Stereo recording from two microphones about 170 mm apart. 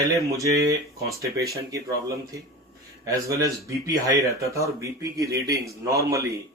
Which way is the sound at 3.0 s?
20° right (ahead or behind).